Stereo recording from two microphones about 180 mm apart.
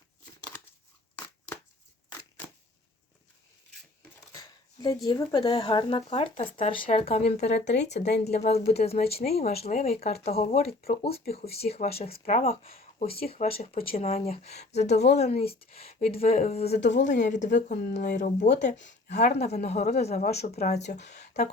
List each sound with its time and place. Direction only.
4.3 s a sound: 20° left (ahead or behind)
5.0 s speech: 25° left (ahead or behind)
7.9 s speech: 70° left (ahead or behind)
8.2 s speech: 35° left (ahead or behind)
12.6 s speech: 35° left (ahead or behind)
16.7 s speech: 75° left (ahead or behind)
17.2 s speech: 45° left (ahead or behind)
19.0 s speech: 70° left (ahead or behind)
19.4 s speech: 35° left (ahead or behind)